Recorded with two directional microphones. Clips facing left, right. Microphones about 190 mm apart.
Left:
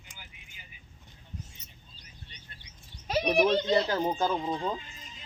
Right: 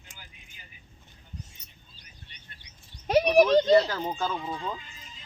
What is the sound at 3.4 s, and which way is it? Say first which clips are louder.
Speech: right 5 dB; 25° left (ahead or behind).